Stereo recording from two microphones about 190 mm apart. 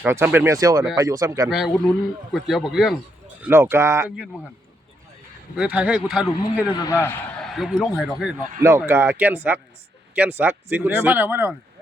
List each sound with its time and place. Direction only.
0.0 s speech: 10° right (ahead or behind)
1.5 s speech: centre (ahead or behind)
3.4 s speech: 10° right (ahead or behind)
5.5 s speech: 5° right (ahead or behind)
6.6 s a man's voice: 15° left (ahead or behind)
7.4 s speech: centre (ahead or behind)
8.4 s a man's voice: 40° right (ahead or behind)
8.8 s speech: 10° right (ahead or behind)